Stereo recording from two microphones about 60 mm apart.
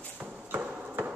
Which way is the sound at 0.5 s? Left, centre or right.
Right.